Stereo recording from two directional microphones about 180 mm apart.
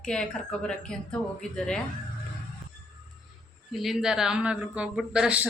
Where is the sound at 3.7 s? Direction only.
Centre (ahead or behind).